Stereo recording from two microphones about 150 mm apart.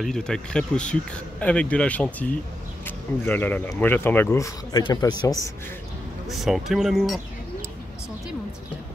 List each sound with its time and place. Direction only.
0.0 s a man's voice: 5° left (ahead or behind); by 5.5 s 25° left (ahead or behind)
6.2 s speech: centre (ahead or behind)